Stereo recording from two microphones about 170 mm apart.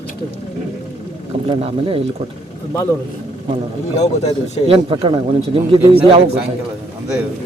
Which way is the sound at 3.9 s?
40° left (ahead or behind).